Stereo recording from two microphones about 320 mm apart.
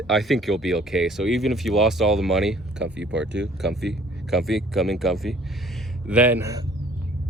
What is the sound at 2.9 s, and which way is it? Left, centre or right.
Speech, right.